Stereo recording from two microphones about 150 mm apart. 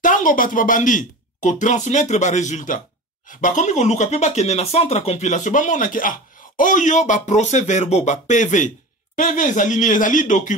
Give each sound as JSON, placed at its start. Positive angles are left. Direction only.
{"t": 0.0, "sound": "speech", "side_deg": 65}